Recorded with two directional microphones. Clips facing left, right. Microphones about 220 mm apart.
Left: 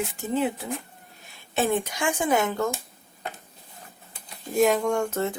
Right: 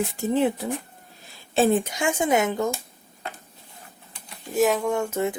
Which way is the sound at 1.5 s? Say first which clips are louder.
Right 4 dB; 30° right (ahead or behind).